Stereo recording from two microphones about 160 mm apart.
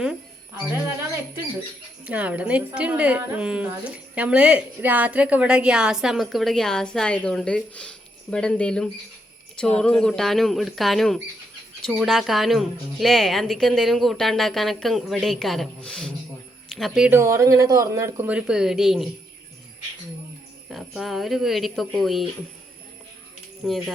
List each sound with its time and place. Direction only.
2.0 s a woman's voice: 10° right (ahead or behind)
17.2 s speech: 20° right (ahead or behind); by 19.0 s centre (ahead or behind)
20.7 s a woman's voice: centre (ahead or behind)
23.6 s a woman's voice: centre (ahead or behind)